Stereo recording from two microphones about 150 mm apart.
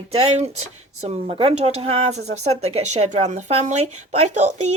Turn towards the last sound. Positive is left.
turn(degrees=-50)  # may be behind; listen again after turning